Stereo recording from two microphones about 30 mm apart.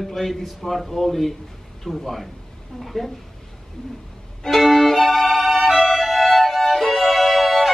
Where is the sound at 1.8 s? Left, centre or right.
Centre.